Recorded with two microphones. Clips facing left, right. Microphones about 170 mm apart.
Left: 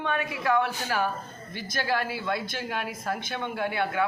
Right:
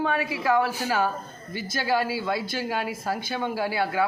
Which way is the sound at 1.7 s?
30° right (ahead or behind).